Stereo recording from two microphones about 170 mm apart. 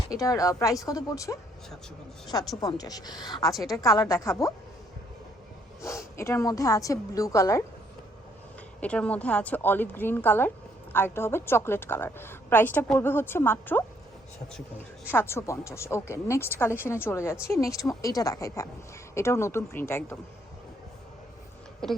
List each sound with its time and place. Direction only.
0.1 s a woman's voice: 20° left (ahead or behind)
2.6 s a woman's voice: 20° left (ahead or behind)
5.8 s a woman's voice: 15° left (ahead or behind)
8.8 s a woman's voice: 10° left (ahead or behind)
21.8 s speech: 5° left (ahead or behind)